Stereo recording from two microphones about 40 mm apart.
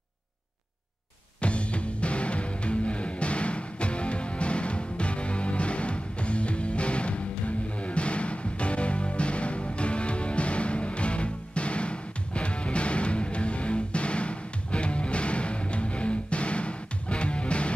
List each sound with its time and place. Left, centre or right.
1.4 s music: left